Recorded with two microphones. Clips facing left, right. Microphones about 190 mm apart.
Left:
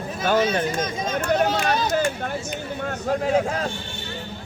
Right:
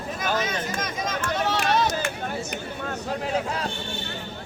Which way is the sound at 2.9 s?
45° left (ahead or behind).